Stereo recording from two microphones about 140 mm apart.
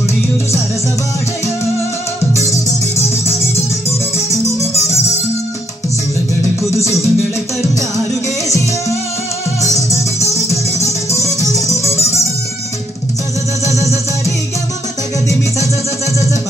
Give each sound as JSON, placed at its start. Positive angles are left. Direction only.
{"t": 4.3, "sound": "music", "side_deg": 20}
{"t": 6.8, "sound": "music", "side_deg": 20}
{"t": 10.3, "sound": "music", "side_deg": 20}
{"t": 13.7, "sound": "music", "side_deg": 20}